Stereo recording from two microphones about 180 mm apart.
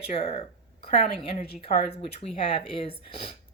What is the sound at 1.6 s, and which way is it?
Speech, 30° left (ahead or behind).